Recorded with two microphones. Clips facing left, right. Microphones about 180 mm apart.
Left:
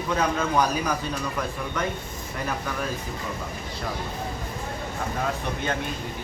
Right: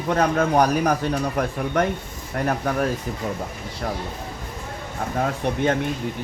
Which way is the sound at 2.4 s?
60° right (ahead or behind).